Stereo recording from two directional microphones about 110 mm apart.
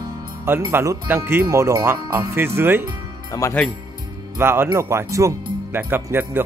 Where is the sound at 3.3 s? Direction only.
30° left (ahead or behind).